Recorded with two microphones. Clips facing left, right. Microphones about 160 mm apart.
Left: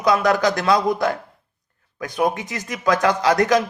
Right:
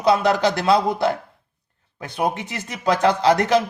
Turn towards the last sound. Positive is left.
turn(degrees=-30)  # may be behind; listen again after turning